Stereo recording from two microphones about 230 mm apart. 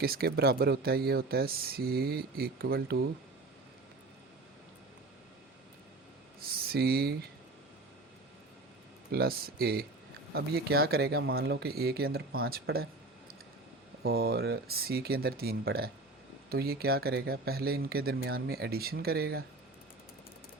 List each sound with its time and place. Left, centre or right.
0.0 s speech: right
6.5 s speech: right
9.1 s speech: right